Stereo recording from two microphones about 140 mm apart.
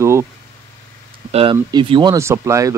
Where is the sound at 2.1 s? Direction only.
20° right (ahead or behind).